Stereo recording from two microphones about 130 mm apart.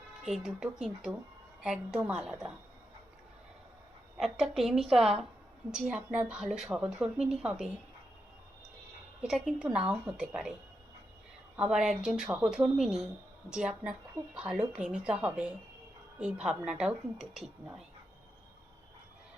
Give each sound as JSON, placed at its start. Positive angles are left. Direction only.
{"t": 0.3, "sound": "a woman's voice", "side_deg": -5}
{"t": 4.2, "sound": "a woman's voice", "side_deg": 0}
{"t": 9.2, "sound": "a woman's voice", "side_deg": -5}
{"t": 11.5, "sound": "a woman's voice", "side_deg": -5}